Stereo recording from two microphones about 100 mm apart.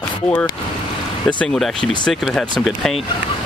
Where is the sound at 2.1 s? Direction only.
Centre (ahead or behind).